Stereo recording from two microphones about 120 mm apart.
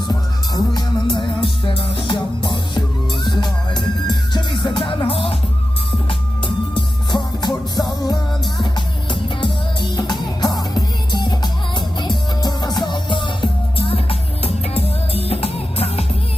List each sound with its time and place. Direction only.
0.1 s music: 35° left (ahead or behind); by 5.4 s 50° left (ahead or behind)
7.1 s music: 35° left (ahead or behind); by 16.0 s 55° left (ahead or behind)